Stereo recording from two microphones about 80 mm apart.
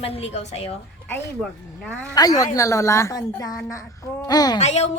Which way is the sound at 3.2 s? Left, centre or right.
Left.